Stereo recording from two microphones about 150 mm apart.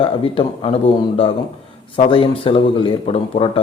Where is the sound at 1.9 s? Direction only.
35° left (ahead or behind).